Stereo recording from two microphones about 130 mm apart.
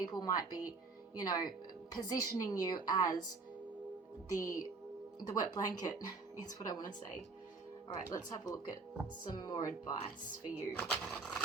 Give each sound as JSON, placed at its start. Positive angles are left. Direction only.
{"t": 0.0, "sound": "a woman's voice", "side_deg": 30}
{"t": 4.3, "sound": "a woman's voice", "side_deg": 25}
{"t": 8.0, "sound": "a woman's voice", "side_deg": 25}
{"t": 10.8, "sound": "speech", "side_deg": 5}